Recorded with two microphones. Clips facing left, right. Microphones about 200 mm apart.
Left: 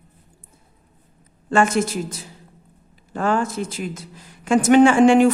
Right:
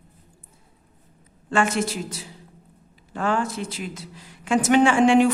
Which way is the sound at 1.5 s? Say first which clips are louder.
Left 4 dB; 45° left (ahead or behind).